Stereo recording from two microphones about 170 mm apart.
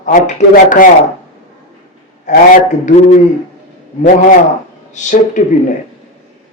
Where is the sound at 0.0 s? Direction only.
45° left (ahead or behind).